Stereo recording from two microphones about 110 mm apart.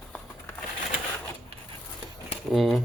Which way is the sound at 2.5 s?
Centre (ahead or behind).